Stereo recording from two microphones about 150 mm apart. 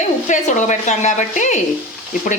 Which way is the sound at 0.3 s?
55° left (ahead or behind).